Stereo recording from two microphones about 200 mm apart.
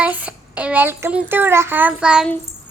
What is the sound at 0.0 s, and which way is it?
A child's voice, 10° right (ahead or behind).